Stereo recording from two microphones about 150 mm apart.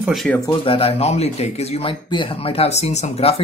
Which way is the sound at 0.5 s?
35° left (ahead or behind).